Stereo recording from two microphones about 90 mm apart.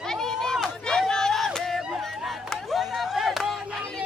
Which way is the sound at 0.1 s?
5° left (ahead or behind).